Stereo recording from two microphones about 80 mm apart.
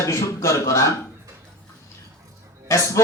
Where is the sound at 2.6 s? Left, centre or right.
Left.